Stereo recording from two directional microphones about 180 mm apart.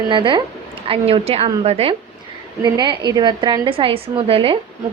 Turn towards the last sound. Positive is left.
turn(degrees=-30)  # may be behind; listen again after turning